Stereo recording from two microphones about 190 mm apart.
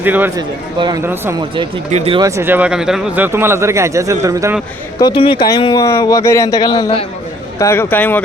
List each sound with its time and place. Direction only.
0.0 s speech: 10° right (ahead or behind)
1.9 s speech: 35° right (ahead or behind)
2.2 s speech: 15° right (ahead or behind)
4.9 s speech: 25° left (ahead or behind); by 8.2 s 10° left (ahead or behind)